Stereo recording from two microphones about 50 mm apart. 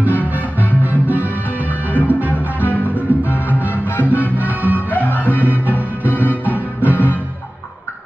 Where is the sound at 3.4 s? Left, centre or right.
Left.